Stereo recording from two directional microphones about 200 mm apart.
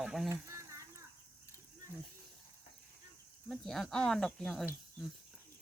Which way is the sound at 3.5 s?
Centre (ahead or behind).